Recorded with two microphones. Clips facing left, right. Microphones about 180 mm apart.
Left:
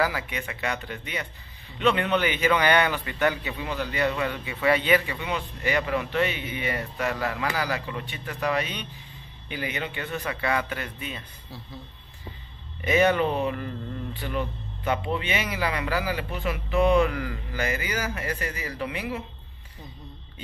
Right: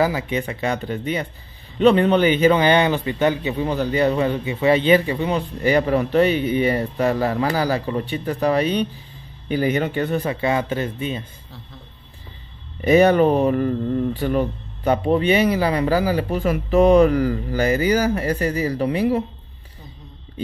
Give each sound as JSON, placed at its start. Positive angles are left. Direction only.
{"t": 0.0, "sound": "a man's voice", "side_deg": -25}
{"t": 12.8, "sound": "a man's voice", "side_deg": -40}